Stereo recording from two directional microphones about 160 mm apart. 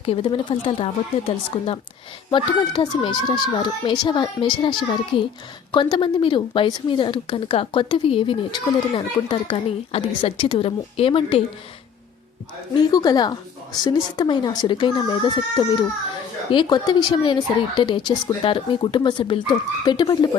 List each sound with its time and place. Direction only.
0.0 s speech: 35° left (ahead or behind)
12.9 s speech: 25° left (ahead or behind)